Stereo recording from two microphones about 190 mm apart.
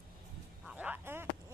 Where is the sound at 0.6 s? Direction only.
5° right (ahead or behind).